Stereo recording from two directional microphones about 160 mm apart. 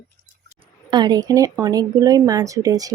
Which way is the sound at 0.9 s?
25° right (ahead or behind).